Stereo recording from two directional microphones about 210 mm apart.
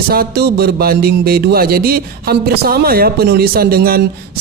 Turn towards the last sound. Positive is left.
turn(degrees=-45)  # may be behind; listen again after turning